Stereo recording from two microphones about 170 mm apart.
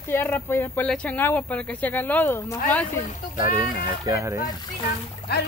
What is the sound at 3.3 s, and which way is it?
Speech, 25° right (ahead or behind).